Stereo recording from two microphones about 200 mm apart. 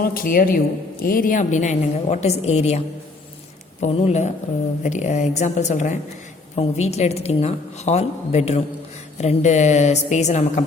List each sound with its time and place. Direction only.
0.0 s a woman's voice: 45° left (ahead or behind)